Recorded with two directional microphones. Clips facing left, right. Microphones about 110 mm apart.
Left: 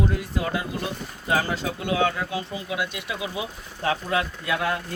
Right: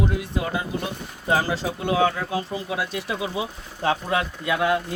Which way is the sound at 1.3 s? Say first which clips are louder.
Right 2 dB; 30° right (ahead or behind).